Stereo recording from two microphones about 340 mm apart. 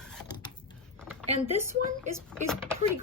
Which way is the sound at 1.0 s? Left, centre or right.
Centre.